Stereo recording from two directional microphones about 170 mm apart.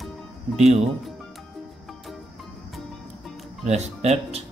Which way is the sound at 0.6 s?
40° right (ahead or behind).